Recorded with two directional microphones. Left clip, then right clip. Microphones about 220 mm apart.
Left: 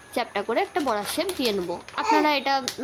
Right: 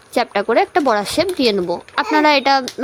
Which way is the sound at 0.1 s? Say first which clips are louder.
Right 10 dB; 30° right (ahead or behind).